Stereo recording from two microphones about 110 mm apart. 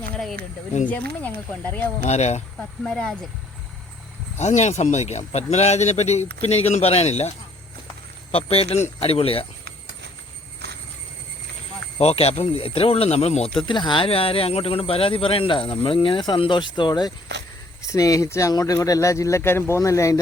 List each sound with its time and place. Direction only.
0.9 s speech: 15° left (ahead or behind)
2.0 s speech: 90° left
2.6 s speech: 10° left (ahead or behind)
4.4 s speech: 90° left
8.3 s speech: 65° left (ahead or behind)
11.9 s speech: 70° left (ahead or behind); by 17.1 s 40° left (ahead or behind)
17.8 s speech: 30° left (ahead or behind)